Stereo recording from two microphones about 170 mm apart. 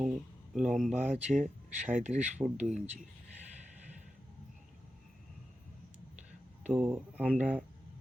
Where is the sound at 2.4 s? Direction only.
25° right (ahead or behind).